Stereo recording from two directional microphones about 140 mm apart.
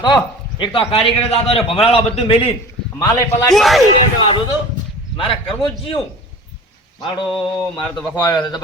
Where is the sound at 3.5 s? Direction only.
Centre (ahead or behind).